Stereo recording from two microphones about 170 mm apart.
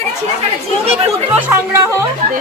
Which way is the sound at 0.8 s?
35° right (ahead or behind).